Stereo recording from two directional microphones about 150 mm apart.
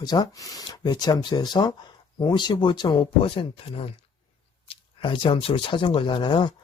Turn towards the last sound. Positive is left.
turn(degrees=30)  # may be behind; listen again after turning